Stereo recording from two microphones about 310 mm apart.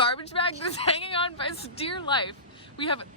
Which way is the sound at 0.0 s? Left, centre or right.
Centre.